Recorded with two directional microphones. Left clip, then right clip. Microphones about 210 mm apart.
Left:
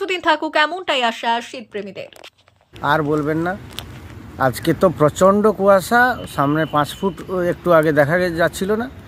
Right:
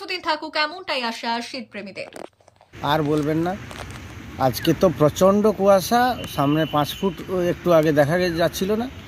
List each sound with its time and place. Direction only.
0.0 s a woman's voice: 20° left (ahead or behind)
2.8 s speech: centre (ahead or behind)
4.6 s speech: 5° left (ahead or behind)